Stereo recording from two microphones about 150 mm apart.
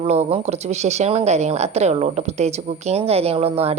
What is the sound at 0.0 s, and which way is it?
Speech, 45° right (ahead or behind).